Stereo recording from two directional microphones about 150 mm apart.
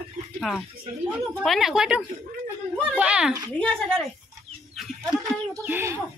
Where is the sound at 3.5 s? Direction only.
5° left (ahead or behind).